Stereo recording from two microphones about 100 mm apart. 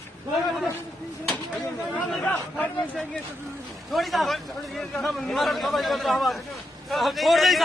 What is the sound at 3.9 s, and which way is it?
A man's voice, centre (ahead or behind).